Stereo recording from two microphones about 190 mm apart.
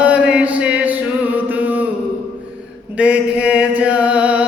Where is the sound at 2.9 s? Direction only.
5° right (ahead or behind).